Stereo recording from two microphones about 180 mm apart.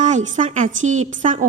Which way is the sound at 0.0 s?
40° right (ahead or behind).